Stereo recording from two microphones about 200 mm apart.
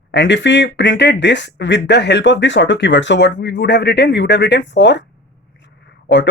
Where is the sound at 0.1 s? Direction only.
65° left (ahead or behind).